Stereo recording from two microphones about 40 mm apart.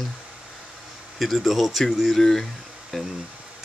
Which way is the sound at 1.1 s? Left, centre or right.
Centre.